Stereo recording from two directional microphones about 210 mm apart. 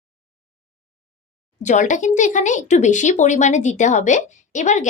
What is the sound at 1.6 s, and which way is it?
Speech, 35° left (ahead or behind).